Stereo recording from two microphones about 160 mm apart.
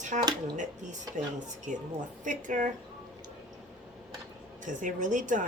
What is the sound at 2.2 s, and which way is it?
Speech, 50° right (ahead or behind).